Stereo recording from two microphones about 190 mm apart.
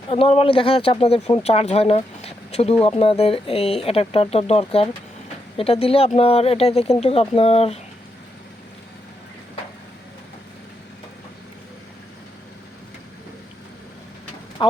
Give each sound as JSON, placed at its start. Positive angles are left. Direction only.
{"t": 0.1, "sound": "speech", "side_deg": 30}
{"t": 14.6, "sound": "speech", "side_deg": 25}